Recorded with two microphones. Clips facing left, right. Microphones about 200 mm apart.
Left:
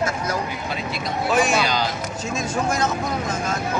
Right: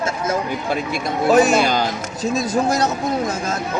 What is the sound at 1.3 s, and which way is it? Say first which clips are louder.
Speech: right 6 dB; 40° right (ahead or behind).